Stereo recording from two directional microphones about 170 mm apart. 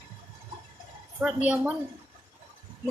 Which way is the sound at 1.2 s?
5° right (ahead or behind).